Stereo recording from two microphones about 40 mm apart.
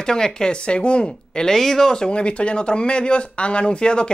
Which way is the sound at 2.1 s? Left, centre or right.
Left.